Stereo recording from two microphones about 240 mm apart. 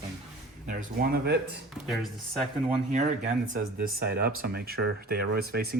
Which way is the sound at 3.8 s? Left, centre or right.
Right.